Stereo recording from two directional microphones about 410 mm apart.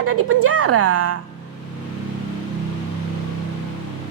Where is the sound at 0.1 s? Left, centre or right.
Right.